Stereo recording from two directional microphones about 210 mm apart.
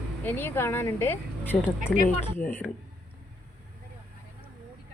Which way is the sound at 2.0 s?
30° left (ahead or behind).